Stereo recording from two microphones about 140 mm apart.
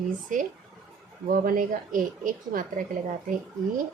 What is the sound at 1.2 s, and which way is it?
Speech, 85° right.